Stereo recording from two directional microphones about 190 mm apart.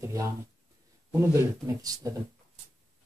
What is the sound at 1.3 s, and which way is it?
Speech, 20° right (ahead or behind).